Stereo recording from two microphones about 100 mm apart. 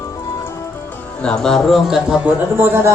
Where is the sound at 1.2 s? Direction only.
10° left (ahead or behind).